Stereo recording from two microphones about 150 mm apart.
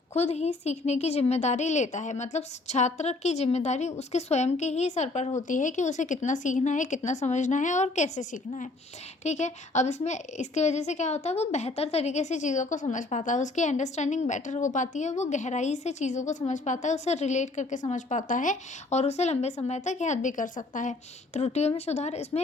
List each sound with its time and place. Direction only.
0.1 s a woman's voice: 45° left (ahead or behind)
21.3 s a woman's voice: 45° left (ahead or behind)